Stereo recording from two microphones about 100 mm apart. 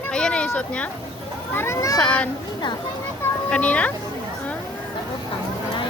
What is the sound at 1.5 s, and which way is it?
Speech, 25° left (ahead or behind).